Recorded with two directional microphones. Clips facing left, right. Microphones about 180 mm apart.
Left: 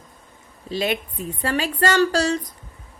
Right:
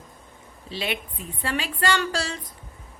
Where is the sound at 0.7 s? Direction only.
45° left (ahead or behind).